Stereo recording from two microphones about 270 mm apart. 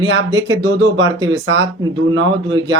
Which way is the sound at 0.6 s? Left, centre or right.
Right.